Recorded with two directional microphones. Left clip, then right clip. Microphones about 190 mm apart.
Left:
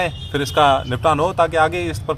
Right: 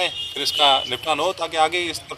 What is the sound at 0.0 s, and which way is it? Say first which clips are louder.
A man's voice: left 1 dB; 15° left (ahead or behind).